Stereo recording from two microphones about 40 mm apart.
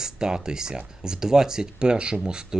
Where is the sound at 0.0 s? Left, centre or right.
Centre.